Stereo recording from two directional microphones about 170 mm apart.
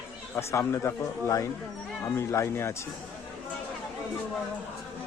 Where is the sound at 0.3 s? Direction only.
15° left (ahead or behind).